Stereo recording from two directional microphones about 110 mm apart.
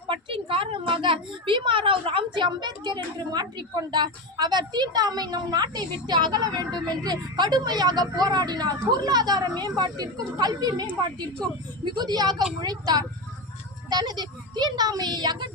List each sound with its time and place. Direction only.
0.1 s a woman's voice: 55° right (ahead or behind); by 10.8 s 40° right (ahead or behind)
11.9 s a woman's voice: 40° right (ahead or behind)